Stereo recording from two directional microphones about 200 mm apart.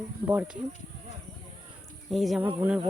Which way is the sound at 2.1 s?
Centre (ahead or behind).